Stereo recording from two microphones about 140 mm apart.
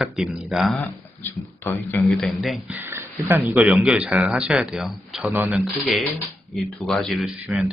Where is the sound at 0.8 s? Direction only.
15° left (ahead or behind).